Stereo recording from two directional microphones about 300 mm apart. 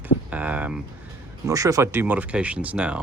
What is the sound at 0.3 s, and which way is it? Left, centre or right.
Speech, centre.